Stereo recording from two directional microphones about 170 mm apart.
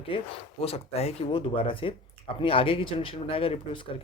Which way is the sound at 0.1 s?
30° left (ahead or behind).